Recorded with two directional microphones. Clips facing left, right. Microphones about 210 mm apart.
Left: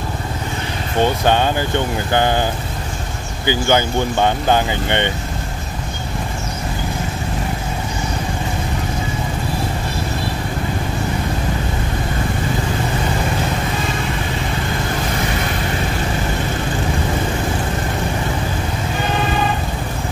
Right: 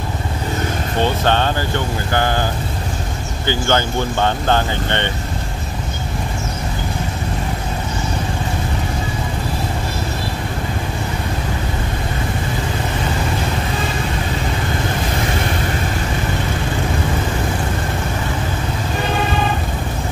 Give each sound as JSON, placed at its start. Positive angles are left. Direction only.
{"t": 1.2, "sound": "speech", "side_deg": 15}
{"t": 3.4, "sound": "speech", "side_deg": 15}